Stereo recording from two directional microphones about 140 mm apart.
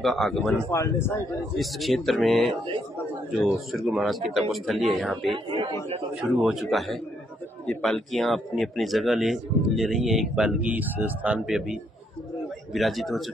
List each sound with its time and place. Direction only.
0.0 s speech: centre (ahead or behind)
0.7 s speech: 15° left (ahead or behind)
1.6 s speech: centre (ahead or behind)
5.3 s speech: 35° right (ahead or behind)
6.3 s speech: centre (ahead or behind)